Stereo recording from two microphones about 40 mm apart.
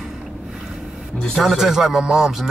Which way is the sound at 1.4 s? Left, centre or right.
Centre.